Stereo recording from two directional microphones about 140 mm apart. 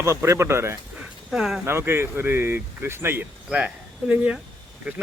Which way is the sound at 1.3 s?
5° right (ahead or behind).